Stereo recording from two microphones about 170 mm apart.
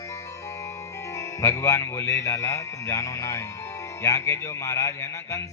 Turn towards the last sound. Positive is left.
turn(degrees=15)  # may be behind; listen again after turning